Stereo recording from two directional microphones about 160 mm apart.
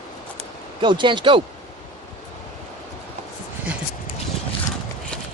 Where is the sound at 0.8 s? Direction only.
30° right (ahead or behind).